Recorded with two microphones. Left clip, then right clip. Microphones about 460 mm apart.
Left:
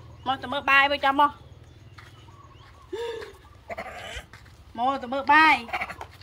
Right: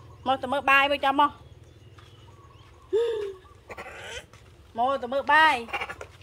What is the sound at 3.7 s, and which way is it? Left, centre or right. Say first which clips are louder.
Goat: left 3 dB; centre.